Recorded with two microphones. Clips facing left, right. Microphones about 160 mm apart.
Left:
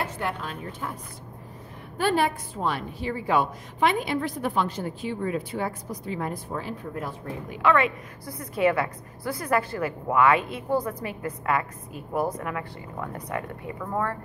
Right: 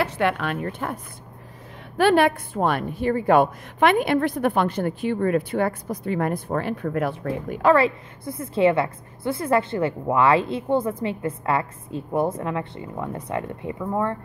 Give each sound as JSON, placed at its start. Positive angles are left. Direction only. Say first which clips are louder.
{"t": 0.0, "sound": "a woman's voice", "louder": "right 7 dB", "side_deg": -75}
{"t": 2.0, "sound": "a woman's voice", "louder": "right 6 dB", "side_deg": -70}
{"t": 7.7, "sound": "a woman's voice", "louder": "right 5 dB", "side_deg": -30}